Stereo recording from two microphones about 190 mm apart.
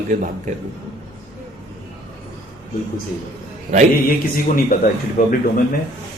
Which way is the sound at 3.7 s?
40° right (ahead or behind).